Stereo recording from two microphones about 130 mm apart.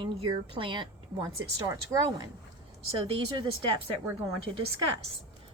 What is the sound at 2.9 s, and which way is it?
Speech, 45° right (ahead or behind).